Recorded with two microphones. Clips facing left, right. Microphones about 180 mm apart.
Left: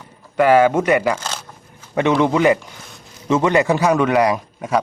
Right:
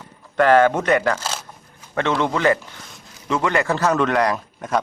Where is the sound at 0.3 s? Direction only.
10° left (ahead or behind).